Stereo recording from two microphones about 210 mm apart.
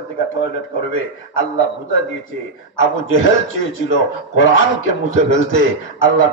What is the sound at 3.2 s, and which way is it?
Speech, 70° left (ahead or behind).